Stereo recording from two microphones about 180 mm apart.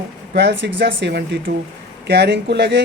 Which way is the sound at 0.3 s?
70° right (ahead or behind).